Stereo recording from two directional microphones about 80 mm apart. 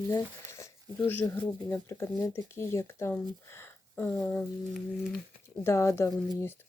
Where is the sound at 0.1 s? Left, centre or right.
Left.